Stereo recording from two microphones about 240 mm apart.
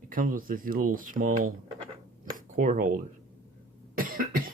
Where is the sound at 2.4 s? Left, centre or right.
Right.